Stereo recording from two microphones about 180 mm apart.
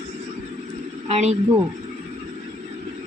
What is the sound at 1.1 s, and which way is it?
Speech, 40° right (ahead or behind).